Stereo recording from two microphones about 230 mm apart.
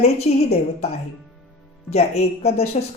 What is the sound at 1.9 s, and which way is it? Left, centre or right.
Speech, left.